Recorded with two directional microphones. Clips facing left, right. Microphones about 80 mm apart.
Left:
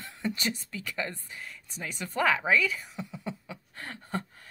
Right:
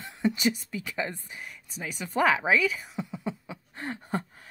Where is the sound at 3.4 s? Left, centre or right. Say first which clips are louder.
Right 5 dB; right.